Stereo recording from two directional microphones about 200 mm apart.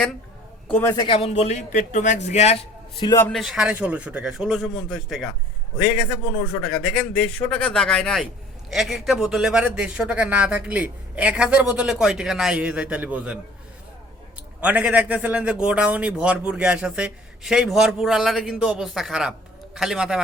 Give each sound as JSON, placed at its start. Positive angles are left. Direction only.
{"t": 0.7, "sound": "a man's voice", "side_deg": 10}
{"t": 1.0, "sound": "a man's voice", "side_deg": 25}
{"t": 3.2, "sound": "a man's voice", "side_deg": 5}
{"t": 6.7, "sound": "a man's voice", "side_deg": 5}
{"t": 14.6, "sound": "a man's voice", "side_deg": -5}